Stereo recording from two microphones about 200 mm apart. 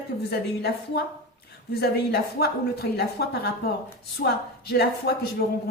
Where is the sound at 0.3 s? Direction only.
50° left (ahead or behind).